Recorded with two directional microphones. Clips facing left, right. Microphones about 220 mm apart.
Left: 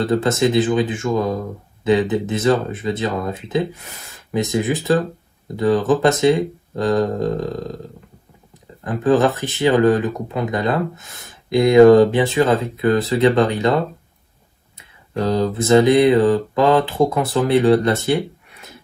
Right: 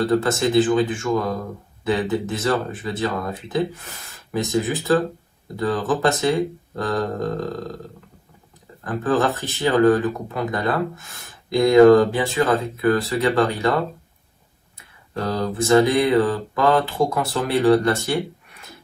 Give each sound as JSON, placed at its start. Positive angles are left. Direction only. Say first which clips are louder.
{"t": 0.1, "sound": "speech", "louder": "left 4 dB", "side_deg": 20}
{"t": 8.8, "sound": "speech", "louder": "left 5 dB", "side_deg": 15}
{"t": 15.1, "sound": "speech", "louder": "left 5 dB", "side_deg": 15}